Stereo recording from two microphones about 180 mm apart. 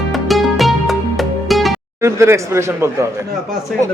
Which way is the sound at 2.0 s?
15° right (ahead or behind).